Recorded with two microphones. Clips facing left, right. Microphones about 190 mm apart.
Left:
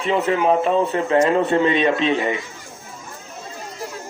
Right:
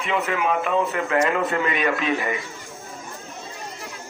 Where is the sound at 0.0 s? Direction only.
35° left (ahead or behind).